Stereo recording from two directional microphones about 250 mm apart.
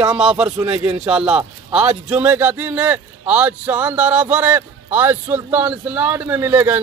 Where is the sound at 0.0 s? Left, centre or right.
Centre.